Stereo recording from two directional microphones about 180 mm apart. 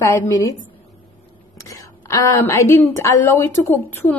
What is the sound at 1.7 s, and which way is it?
A woman's voice, 20° left (ahead or behind).